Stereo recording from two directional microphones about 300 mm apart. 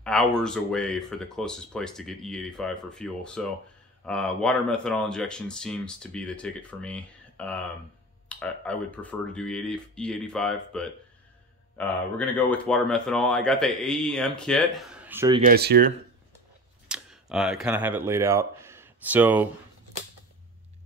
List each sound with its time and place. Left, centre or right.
0.0 s speech: centre
15.4 s speech: right
16.8 s speech: centre